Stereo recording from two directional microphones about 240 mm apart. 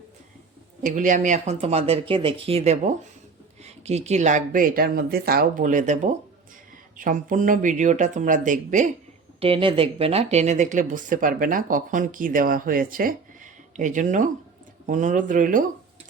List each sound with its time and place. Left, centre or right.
0.8 s speech: right
9.4 s speech: right